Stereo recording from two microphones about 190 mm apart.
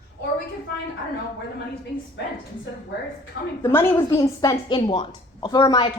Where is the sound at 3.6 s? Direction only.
10° left (ahead or behind).